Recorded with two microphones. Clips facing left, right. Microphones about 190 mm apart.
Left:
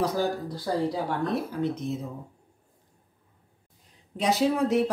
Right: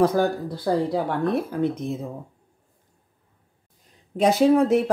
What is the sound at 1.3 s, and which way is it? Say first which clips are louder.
Speech: right 4 dB; 55° right (ahead or behind).